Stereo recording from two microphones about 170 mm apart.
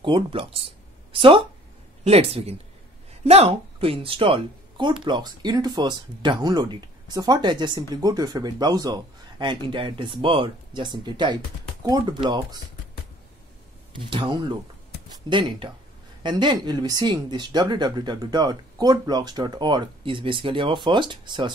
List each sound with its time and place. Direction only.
0.0 s speech: 30° right (ahead or behind)
14.1 s speech: 30° right (ahead or behind)